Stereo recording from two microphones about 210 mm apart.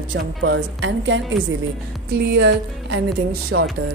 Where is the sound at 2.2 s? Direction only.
50° right (ahead or behind).